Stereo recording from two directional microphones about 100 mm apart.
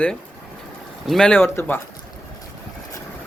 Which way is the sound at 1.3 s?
20° left (ahead or behind).